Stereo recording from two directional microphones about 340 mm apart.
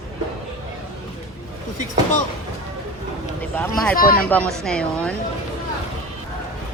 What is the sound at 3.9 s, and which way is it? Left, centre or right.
Speech, left.